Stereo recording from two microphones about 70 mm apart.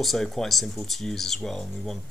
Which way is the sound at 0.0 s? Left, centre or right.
Centre.